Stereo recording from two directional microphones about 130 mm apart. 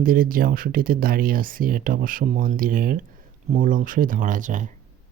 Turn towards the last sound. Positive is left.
turn(degrees=-80)